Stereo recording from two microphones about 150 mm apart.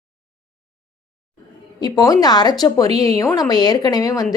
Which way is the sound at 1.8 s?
25° left (ahead or behind).